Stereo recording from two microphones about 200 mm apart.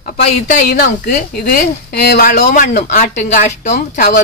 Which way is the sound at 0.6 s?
50° left (ahead or behind).